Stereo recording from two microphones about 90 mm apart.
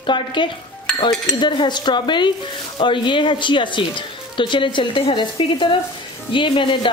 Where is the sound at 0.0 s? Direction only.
65° left (ahead or behind).